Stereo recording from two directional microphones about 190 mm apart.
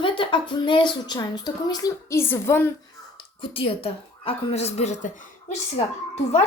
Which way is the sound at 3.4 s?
30° left (ahead or behind).